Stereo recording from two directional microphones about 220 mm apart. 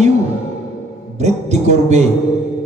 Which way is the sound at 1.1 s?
30° right (ahead or behind).